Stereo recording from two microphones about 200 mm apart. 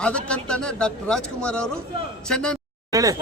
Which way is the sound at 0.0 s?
5° left (ahead or behind).